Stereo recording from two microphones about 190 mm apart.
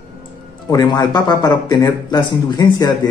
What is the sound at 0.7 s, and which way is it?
Speech, 20° left (ahead or behind).